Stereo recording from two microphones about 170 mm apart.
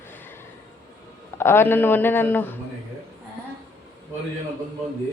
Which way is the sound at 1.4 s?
15° left (ahead or behind).